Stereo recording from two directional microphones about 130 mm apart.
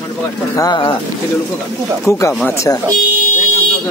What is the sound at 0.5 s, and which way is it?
Speech, 35° left (ahead or behind).